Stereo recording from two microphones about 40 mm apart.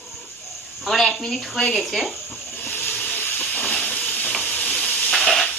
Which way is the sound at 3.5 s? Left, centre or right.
Left.